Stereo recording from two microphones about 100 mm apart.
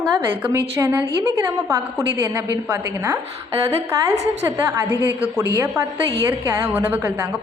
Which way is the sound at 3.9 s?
35° right (ahead or behind).